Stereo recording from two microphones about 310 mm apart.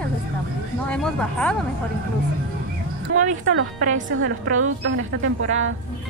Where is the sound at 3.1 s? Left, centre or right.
Right.